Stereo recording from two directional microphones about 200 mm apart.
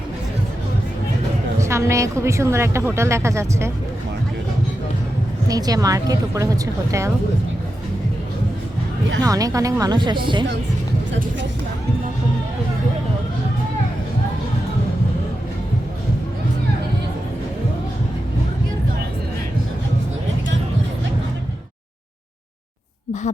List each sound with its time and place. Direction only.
1.6 s a woman's voice: 15° right (ahead or behind)
5.5 s a woman's voice: 20° right (ahead or behind)
9.2 s a woman's voice: 15° right (ahead or behind)